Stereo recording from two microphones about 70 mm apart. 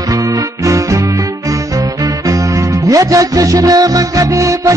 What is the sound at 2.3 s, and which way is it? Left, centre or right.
Music, right.